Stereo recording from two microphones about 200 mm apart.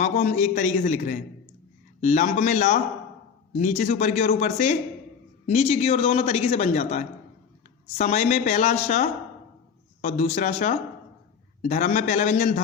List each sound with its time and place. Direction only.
0.0 s a man's voice: 35° left (ahead or behind)